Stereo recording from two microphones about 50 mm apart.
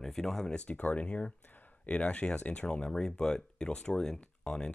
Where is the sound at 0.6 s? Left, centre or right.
Left.